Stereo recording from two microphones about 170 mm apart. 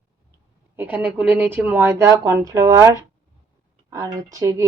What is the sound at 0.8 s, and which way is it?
A woman's voice, 10° right (ahead or behind).